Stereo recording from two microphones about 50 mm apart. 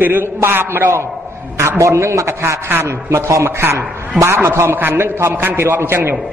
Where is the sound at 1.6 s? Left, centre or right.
Right.